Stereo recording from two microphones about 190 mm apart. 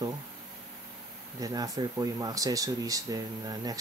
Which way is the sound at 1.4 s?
20° right (ahead or behind).